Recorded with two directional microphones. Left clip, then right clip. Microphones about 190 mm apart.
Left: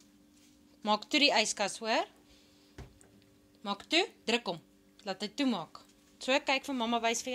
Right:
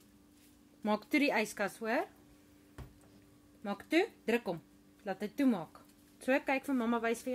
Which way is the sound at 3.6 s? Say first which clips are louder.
Left 2 dB; 40° right (ahead or behind).